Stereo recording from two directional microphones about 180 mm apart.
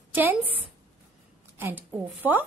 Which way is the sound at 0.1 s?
10° right (ahead or behind).